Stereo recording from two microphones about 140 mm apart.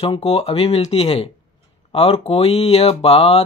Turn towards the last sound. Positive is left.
turn(degrees=45)  # may be behind; listen again after turning